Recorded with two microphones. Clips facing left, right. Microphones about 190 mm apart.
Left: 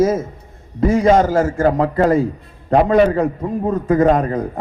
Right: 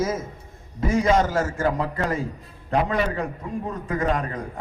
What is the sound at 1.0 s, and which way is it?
A man's voice, 40° left (ahead or behind).